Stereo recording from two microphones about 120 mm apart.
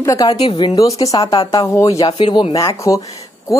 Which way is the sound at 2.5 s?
25° left (ahead or behind).